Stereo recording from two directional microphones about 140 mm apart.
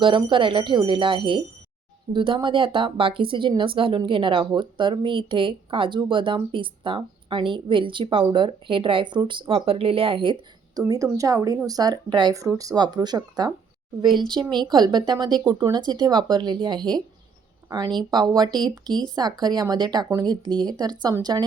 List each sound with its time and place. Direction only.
0.0 s speech: 35° right (ahead or behind)
10.8 s speech: 25° right (ahead or behind)